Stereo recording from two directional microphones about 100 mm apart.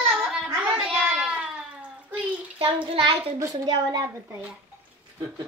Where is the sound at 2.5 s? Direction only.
65° right (ahead or behind).